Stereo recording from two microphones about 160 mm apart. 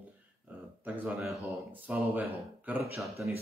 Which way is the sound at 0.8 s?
5° right (ahead or behind).